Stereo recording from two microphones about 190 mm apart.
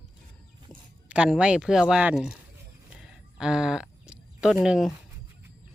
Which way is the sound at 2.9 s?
5° right (ahead or behind).